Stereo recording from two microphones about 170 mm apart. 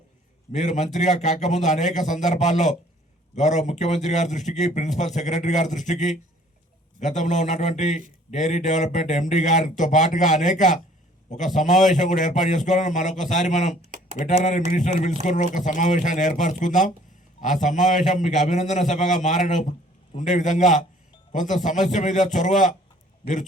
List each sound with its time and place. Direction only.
0.5 s speech: 45° left (ahead or behind)